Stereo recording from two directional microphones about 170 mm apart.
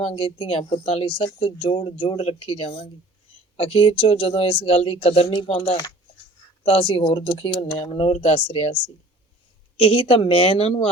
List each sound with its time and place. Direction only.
0.0 s speech: 30° left (ahead or behind)